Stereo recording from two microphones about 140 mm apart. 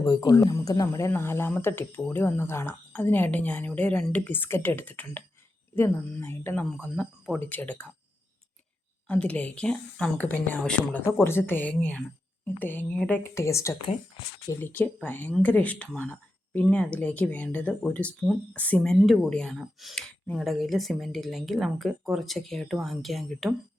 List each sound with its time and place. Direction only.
0.0 s speech: 30° left (ahead or behind); by 7.9 s 10° left (ahead or behind)
9.0 s speech: 10° left (ahead or behind)